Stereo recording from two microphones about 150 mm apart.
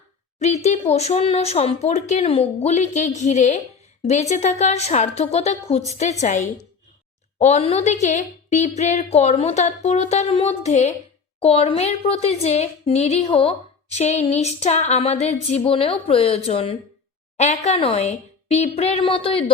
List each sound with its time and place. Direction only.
0.3 s a woman's voice: 50° left (ahead or behind)